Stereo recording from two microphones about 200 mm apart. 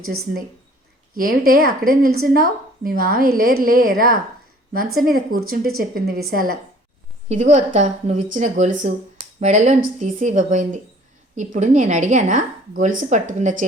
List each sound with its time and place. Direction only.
1.1 s a woman's voice: 45° right (ahead or behind)
7.3 s speech: 35° right (ahead or behind)